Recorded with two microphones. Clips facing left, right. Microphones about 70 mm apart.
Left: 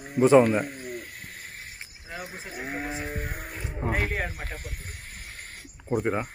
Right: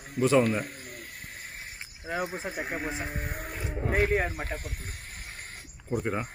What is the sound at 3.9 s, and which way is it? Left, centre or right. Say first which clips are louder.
Speech: right 7 dB; centre.